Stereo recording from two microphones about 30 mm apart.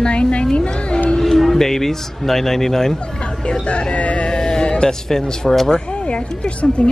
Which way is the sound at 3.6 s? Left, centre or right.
Left.